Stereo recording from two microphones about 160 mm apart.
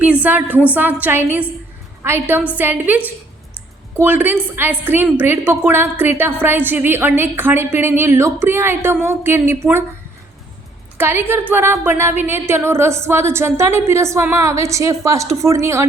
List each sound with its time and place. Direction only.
0.0 s a woman's voice: 10° right (ahead or behind)
10.9 s a woman's voice: 15° right (ahead or behind)